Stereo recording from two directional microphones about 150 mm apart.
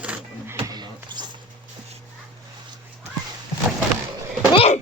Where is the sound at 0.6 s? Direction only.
30° right (ahead or behind).